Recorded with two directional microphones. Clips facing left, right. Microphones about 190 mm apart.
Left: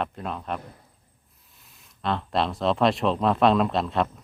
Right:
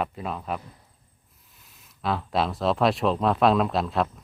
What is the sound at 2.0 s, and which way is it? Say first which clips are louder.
Speech: even; 5° right (ahead or behind).